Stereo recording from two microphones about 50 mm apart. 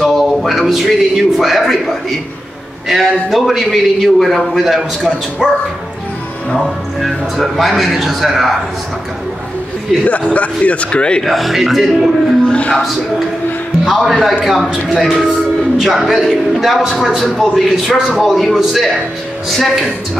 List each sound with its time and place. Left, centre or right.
0.0 s a man's voice: centre
6.6 s a man's voice: centre
10.0 s a man's voice: left
11.2 s a man's voice: centre
12.4 s a man's voice: left
13.8 s a man's voice: centre